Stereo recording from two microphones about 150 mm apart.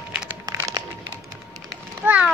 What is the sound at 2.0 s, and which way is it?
Children playing, 10° right (ahead or behind).